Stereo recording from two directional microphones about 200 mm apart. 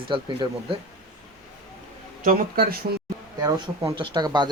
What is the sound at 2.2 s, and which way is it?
Speech, 45° right (ahead or behind).